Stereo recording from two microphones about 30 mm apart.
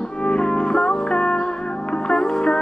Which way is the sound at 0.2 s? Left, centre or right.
Left.